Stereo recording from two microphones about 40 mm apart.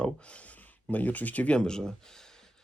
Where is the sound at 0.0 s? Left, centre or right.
Left.